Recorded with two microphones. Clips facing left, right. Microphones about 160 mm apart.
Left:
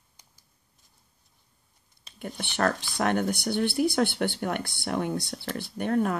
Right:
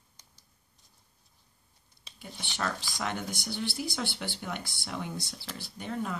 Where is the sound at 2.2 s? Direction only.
55° left (ahead or behind).